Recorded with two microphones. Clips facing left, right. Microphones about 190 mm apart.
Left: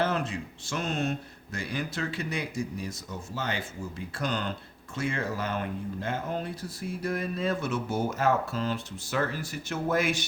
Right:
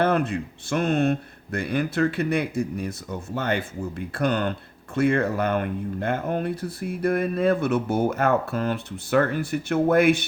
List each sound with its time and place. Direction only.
0.0 s speech: 60° right (ahead or behind)